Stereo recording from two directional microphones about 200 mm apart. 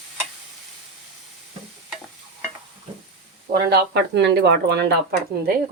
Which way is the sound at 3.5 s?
55° right (ahead or behind).